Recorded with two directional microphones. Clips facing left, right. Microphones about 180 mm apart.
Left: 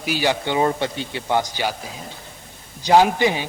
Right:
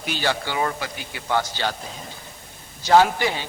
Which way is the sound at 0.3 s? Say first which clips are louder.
Left 4 dB; 20° left (ahead or behind).